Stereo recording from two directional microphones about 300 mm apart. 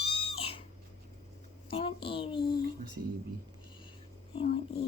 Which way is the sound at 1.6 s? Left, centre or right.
Centre.